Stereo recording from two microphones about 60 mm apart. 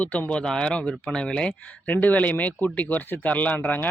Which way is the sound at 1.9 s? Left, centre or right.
Left.